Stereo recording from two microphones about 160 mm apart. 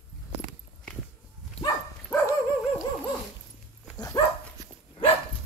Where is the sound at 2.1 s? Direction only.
20° left (ahead or behind).